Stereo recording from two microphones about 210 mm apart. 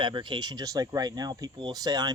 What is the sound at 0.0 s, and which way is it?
Speech, 20° right (ahead or behind).